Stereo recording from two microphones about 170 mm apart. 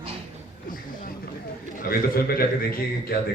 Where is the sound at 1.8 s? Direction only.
60° left (ahead or behind).